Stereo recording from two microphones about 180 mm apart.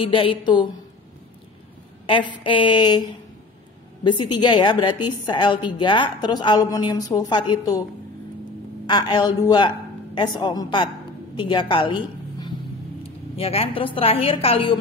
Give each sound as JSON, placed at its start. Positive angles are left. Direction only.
{"t": 0.0, "sound": "a woman's voice", "side_deg": 30}
{"t": 2.0, "sound": "a woman's voice", "side_deg": 30}
{"t": 8.8, "sound": "a woman's voice", "side_deg": 25}